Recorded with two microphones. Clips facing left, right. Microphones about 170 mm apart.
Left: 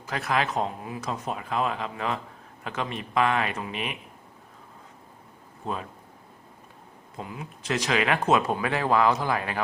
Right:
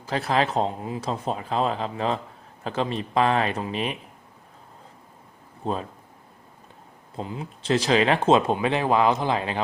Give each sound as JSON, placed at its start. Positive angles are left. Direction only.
{"t": 0.0, "sound": "speech", "side_deg": -30}
{"t": 5.6, "sound": "speech", "side_deg": -30}
{"t": 7.2, "sound": "speech", "side_deg": -30}